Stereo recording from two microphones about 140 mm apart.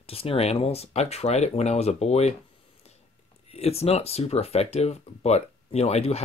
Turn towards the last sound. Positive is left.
turn(degrees=50)  # may be behind; listen again after turning